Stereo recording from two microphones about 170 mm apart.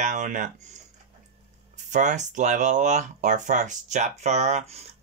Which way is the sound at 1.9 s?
45° right (ahead or behind).